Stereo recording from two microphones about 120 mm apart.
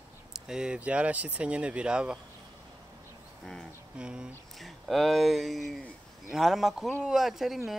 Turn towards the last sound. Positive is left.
turn(degrees=0)  # may be behind; listen again after turning